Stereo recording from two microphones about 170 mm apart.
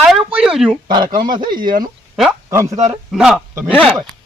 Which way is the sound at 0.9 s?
25° right (ahead or behind).